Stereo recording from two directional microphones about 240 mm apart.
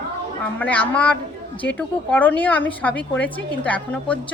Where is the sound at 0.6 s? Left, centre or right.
Centre.